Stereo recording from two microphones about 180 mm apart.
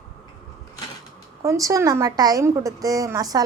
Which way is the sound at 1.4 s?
15° right (ahead or behind).